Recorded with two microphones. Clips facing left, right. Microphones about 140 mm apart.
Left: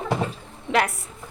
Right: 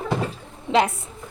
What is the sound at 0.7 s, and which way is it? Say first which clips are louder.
Speech: right 3 dB; 25° right (ahead or behind).